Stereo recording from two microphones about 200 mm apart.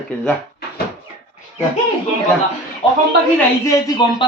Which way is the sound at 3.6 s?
20° left (ahead or behind).